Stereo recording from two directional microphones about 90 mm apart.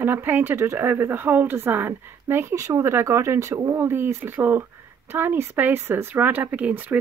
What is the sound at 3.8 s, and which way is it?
Speech, 25° right (ahead or behind).